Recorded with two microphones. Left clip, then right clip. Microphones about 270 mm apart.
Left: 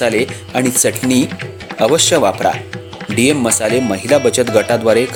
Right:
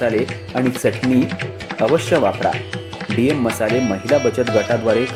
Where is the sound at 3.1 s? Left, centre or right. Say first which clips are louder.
Left 4 dB; centre.